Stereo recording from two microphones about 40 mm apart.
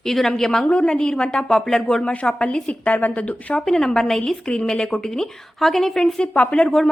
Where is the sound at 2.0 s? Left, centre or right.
Left.